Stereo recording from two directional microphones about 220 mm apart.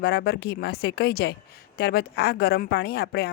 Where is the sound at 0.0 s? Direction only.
45° left (ahead or behind).